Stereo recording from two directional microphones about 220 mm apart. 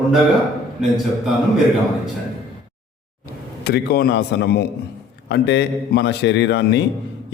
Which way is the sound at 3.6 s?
45° left (ahead or behind).